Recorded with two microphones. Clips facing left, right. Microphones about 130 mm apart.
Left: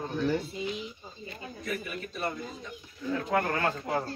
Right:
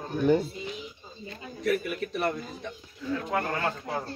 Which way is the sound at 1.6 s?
75° right (ahead or behind).